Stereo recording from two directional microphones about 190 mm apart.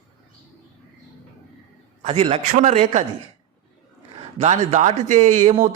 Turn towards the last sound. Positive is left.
turn(degrees=-40)  # may be behind; listen again after turning